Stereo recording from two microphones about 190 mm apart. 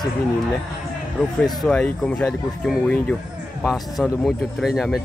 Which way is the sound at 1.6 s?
5° left (ahead or behind).